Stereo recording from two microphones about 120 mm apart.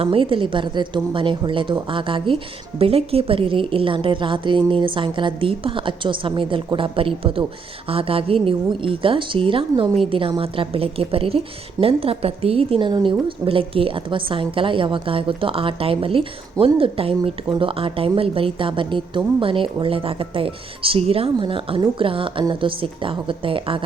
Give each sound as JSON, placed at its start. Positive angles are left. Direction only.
{"t": 0.0, "sound": "a woman's voice", "side_deg": -50}